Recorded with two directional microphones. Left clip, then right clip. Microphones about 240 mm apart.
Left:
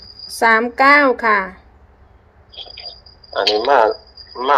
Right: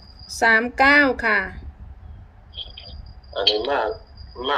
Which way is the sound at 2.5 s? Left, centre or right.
Left.